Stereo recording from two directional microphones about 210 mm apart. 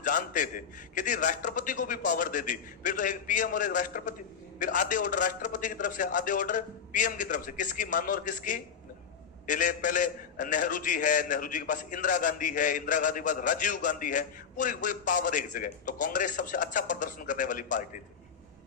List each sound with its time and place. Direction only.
0.0 s a man's voice: 40° left (ahead or behind)